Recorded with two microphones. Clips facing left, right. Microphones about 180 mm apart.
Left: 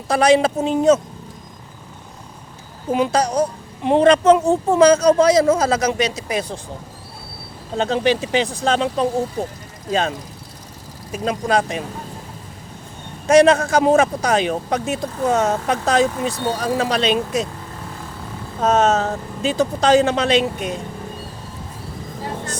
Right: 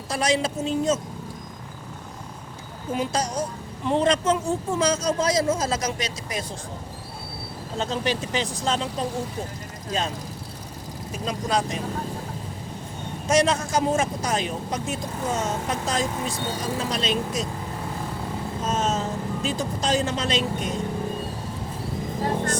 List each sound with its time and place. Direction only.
0.1 s speech: 60° left (ahead or behind)
2.9 s speech: 70° left (ahead or behind)
7.8 s speech: 70° left (ahead or behind)
11.3 s speech: 60° left (ahead or behind)
13.2 s speech: 60° left (ahead or behind)
18.6 s speech: 70° left (ahead or behind)